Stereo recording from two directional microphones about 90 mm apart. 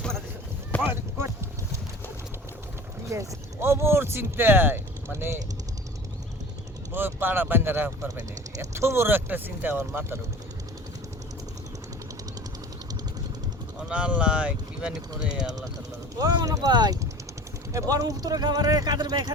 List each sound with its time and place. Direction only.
0.8 s clip-clop: 20° right (ahead or behind)
3.1 s speech: 30° right (ahead or behind)
6.9 s speech: 25° right (ahead or behind)
13.7 s speech: 15° right (ahead or behind)
16.1 s speech: 45° right (ahead or behind)